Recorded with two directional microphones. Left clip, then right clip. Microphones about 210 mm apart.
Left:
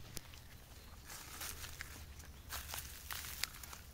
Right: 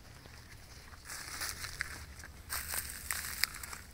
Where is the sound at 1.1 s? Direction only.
10° right (ahead or behind).